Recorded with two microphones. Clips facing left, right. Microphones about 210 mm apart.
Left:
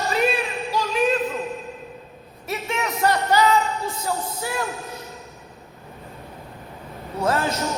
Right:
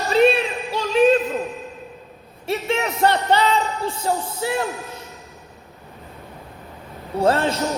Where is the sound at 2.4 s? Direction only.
30° right (ahead or behind).